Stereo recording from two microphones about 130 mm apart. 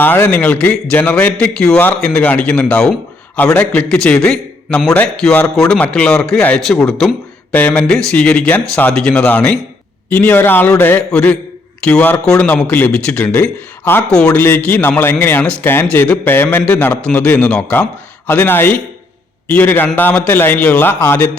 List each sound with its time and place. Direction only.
0.0 s a man's voice: 15° left (ahead or behind)